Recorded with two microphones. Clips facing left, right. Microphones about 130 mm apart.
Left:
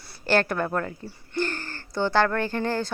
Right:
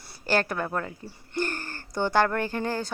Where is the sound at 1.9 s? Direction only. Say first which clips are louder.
Left 1 dB; 15° right (ahead or behind).